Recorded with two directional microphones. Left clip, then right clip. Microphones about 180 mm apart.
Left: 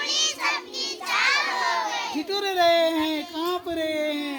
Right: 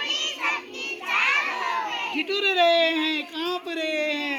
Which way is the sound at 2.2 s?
60° left (ahead or behind).